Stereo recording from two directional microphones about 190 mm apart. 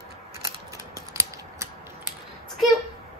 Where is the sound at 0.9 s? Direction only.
15° right (ahead or behind).